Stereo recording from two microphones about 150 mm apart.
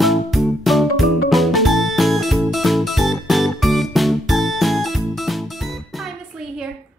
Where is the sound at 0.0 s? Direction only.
Centre (ahead or behind).